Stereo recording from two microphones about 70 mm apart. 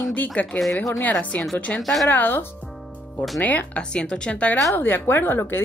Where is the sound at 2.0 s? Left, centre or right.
Left.